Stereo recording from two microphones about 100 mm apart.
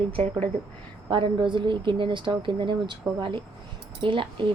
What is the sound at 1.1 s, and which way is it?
A woman's voice, 55° right (ahead or behind).